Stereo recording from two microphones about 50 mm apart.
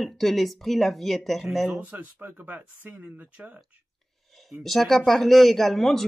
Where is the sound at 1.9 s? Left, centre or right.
Right.